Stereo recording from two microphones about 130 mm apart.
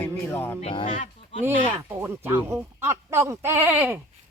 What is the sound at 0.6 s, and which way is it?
Speech, 40° left (ahead or behind).